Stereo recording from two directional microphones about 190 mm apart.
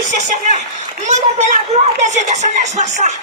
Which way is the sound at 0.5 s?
40° right (ahead or behind).